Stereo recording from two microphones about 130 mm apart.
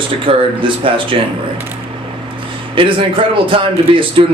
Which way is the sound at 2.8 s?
40° right (ahead or behind).